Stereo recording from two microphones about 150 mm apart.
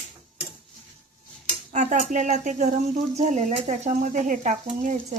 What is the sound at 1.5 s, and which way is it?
Cutlery, 55° right (ahead or behind).